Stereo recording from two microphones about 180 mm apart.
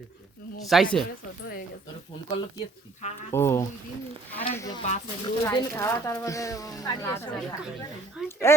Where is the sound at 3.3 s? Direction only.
15° left (ahead or behind).